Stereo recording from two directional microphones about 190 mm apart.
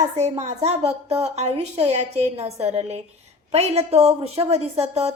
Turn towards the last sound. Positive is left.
turn(degrees=-35)  # may be behind; listen again after turning